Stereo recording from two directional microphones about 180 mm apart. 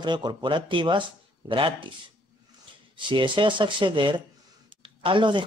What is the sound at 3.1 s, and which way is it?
Speech, 25° right (ahead or behind).